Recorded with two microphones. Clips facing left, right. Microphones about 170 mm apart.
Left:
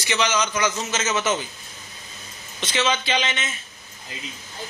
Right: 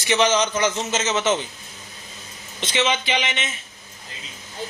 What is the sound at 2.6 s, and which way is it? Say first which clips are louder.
Speech: right 1 dB; 20° right (ahead or behind).